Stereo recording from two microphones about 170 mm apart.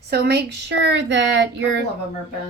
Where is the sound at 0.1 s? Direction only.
75° right (ahead or behind); by 1.8 s 90° right.